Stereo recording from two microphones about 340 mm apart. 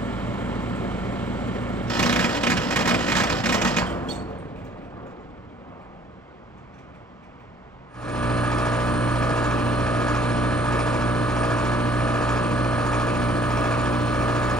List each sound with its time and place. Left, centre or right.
0.0 s vehicle: centre
8.0 s vehicle: centre